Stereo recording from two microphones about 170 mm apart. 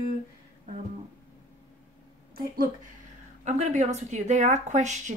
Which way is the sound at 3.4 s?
40° right (ahead or behind).